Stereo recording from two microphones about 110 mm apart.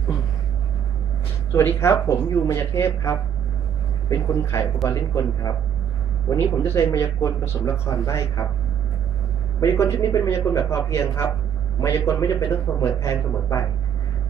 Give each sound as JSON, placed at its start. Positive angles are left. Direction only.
{"t": 1.5, "sound": "speech", "side_deg": 20}
{"t": 9.6, "sound": "speech", "side_deg": 25}